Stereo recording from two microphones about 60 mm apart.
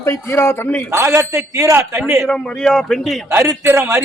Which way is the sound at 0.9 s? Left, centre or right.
Right.